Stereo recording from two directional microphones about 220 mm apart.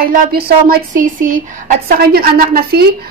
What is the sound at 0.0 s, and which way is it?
Speech, 45° right (ahead or behind).